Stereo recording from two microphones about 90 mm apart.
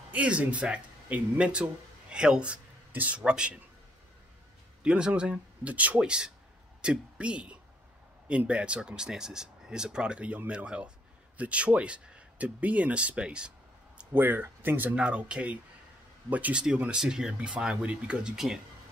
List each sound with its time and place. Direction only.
0.1 s speech: 15° right (ahead or behind)
4.8 s speech: 10° right (ahead or behind)
14.1 s speech: 25° right (ahead or behind); by 18.6 s 5° right (ahead or behind)